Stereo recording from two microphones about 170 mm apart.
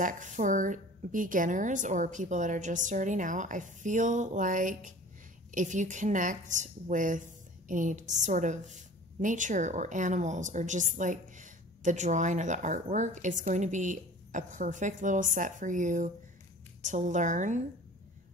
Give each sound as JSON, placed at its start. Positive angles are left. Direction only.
{"t": 0.0, "sound": "speech", "side_deg": -50}